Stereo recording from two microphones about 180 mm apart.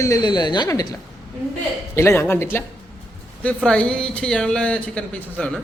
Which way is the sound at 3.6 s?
5° left (ahead or behind).